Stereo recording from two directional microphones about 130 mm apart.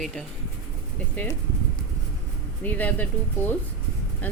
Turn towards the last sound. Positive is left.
turn(degrees=15)  # may be behind; listen again after turning